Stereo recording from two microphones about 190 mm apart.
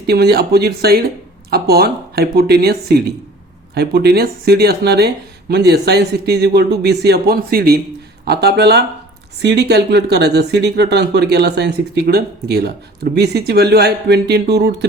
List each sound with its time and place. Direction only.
0.1 s speech: 55° right (ahead or behind)